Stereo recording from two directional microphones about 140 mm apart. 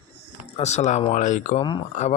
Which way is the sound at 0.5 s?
55° left (ahead or behind).